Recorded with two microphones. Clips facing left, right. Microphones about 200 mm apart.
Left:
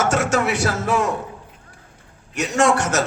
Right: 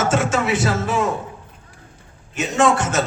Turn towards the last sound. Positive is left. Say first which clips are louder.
# even
turn(degrees=70)  # may be behind; listen again after turning